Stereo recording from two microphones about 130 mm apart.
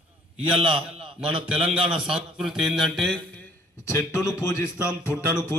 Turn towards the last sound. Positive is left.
turn(degrees=20)  # may be behind; listen again after turning